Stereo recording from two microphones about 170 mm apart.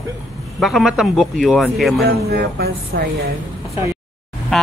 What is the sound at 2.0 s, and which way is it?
Speech, 65° right (ahead or behind).